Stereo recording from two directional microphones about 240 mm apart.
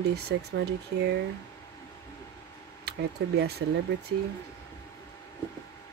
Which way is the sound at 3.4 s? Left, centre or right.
Right.